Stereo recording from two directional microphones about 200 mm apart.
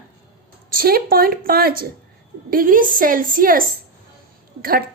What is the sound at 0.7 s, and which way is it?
A woman's voice, 50° right (ahead or behind).